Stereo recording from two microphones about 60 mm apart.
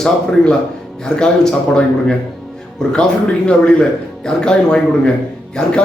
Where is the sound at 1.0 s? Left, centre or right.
Centre.